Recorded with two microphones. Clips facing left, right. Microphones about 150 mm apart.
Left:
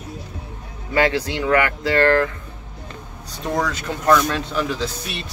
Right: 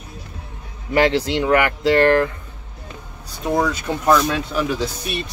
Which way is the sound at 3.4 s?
10° right (ahead or behind).